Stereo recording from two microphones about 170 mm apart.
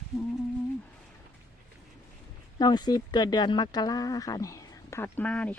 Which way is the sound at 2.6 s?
25° left (ahead or behind).